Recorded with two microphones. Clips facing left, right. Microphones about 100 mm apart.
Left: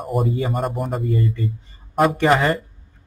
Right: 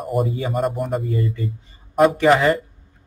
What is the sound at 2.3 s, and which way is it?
Speech, 40° left (ahead or behind).